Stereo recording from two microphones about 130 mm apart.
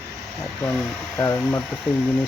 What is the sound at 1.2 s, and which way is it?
Speech, 15° left (ahead or behind).